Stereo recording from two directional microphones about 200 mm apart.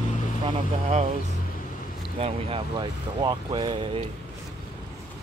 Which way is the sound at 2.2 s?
25° right (ahead or behind).